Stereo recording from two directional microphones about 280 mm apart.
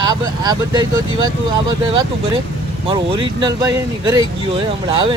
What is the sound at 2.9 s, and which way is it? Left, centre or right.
Speech, centre.